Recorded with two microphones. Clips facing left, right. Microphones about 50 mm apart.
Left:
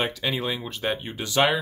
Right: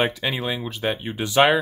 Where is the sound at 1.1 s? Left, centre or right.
Centre.